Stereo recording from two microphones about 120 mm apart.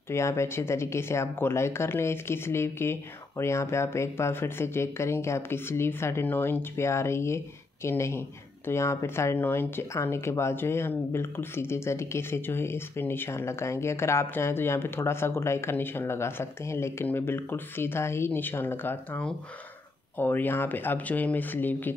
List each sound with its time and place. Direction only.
0.1 s speech: 25° left (ahead or behind)